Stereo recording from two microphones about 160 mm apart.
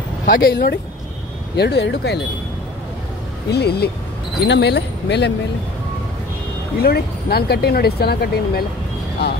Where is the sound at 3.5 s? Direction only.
90° left.